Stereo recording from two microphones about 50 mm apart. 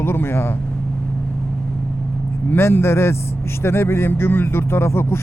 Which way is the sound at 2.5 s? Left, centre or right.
Left.